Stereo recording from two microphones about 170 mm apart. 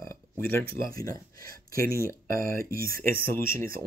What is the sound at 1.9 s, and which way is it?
Speech, 55° right (ahead or behind).